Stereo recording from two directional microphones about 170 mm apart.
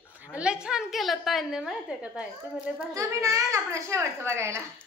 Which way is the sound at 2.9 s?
20° right (ahead or behind).